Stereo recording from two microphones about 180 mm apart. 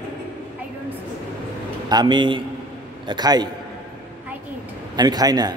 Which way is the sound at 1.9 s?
25° right (ahead or behind).